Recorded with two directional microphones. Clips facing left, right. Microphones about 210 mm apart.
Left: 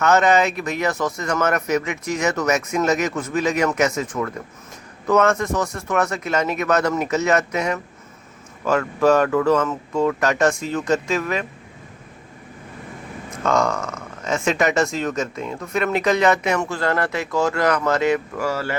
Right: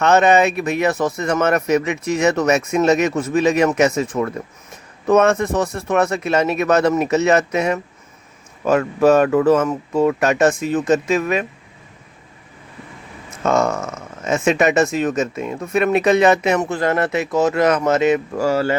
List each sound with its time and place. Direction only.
0.0 s speech: 25° right (ahead or behind)
13.4 s speech: 25° right (ahead or behind)